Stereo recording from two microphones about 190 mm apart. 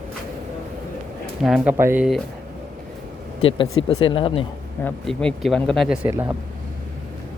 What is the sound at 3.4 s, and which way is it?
Speech, 30° left (ahead or behind).